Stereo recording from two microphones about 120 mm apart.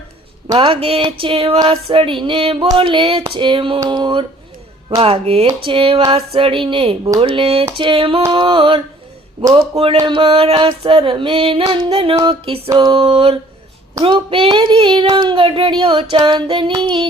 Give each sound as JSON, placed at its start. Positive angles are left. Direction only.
{"t": 0.5, "sound": "child singing", "side_deg": -50}
{"t": 3.8, "sound": "speech", "side_deg": -40}
{"t": 4.9, "sound": "child singing", "side_deg": -50}
{"t": 10.1, "sound": "child singing", "side_deg": -40}
{"t": 12.6, "sound": "speech", "side_deg": -35}
{"t": 12.9, "sound": "child singing", "side_deg": -45}